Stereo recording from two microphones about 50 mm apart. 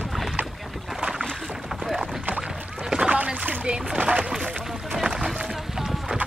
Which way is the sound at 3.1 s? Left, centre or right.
Right.